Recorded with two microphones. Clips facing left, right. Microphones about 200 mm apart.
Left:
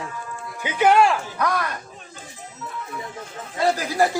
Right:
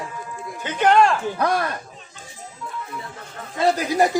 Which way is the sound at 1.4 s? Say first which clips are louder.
Right 3 dB; 30° right (ahead or behind).